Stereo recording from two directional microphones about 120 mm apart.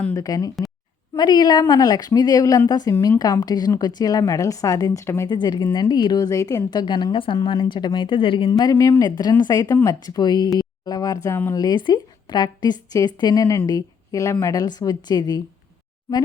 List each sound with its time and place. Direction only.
0.1 s a woman's voice: 30° left (ahead or behind)
5.3 s a woman's voice: 40° left (ahead or behind)
8.5 s a woman's voice: 30° left (ahead or behind)
11.5 s a woman's voice: 35° left (ahead or behind)